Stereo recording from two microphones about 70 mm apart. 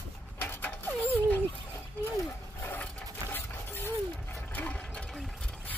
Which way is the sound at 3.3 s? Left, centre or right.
Left.